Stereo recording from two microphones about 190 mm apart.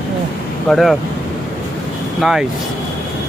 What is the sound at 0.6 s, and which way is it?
Speech, centre (ahead or behind).